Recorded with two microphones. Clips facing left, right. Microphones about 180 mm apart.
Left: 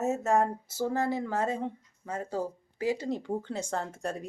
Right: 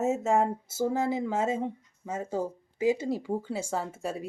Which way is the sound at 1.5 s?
20° right (ahead or behind).